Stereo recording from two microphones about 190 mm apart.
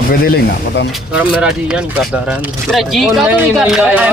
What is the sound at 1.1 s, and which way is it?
A man's voice, 5° right (ahead or behind).